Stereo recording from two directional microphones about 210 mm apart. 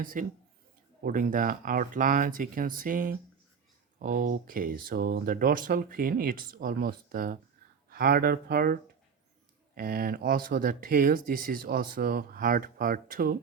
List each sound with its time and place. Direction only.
0.0 s speech: 40° right (ahead or behind)